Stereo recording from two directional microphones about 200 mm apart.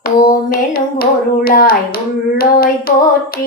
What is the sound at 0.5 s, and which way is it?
Child singing, 50° left (ahead or behind).